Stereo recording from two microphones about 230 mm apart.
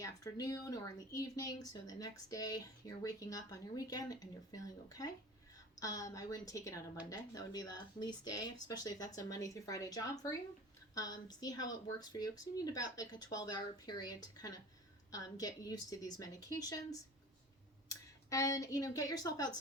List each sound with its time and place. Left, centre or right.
0.0 s a woman's voice: centre